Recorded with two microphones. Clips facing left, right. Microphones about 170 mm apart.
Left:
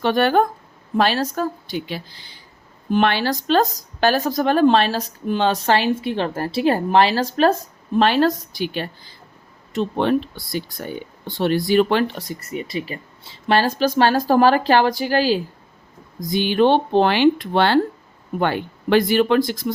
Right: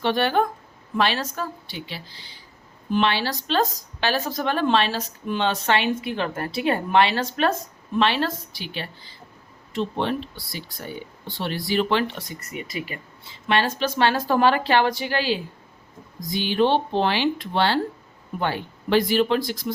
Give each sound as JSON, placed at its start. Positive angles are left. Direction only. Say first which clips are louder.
{"t": 0.0, "sound": "speech", "louder": "left 4 dB", "side_deg": 50}
{"t": 16.3, "sound": "speech", "louder": "left 4 dB", "side_deg": 55}